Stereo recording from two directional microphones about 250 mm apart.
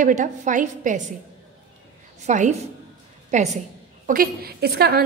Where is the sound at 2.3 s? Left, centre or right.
Right.